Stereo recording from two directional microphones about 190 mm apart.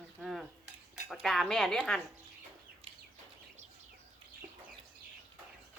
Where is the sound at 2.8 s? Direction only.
30° right (ahead or behind).